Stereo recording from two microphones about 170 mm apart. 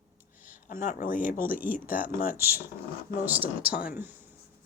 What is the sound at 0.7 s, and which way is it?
Speech, 55° left (ahead or behind).